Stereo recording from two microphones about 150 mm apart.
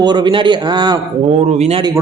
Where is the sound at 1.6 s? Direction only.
40° right (ahead or behind).